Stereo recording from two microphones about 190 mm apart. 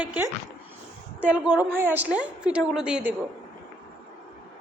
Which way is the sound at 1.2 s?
10° right (ahead or behind).